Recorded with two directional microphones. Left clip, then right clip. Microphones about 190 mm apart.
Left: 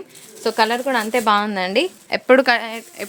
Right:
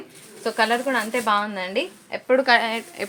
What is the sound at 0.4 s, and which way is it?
Speech, 60° left (ahead or behind).